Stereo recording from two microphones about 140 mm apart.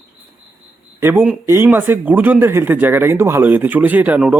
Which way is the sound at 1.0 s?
15° right (ahead or behind).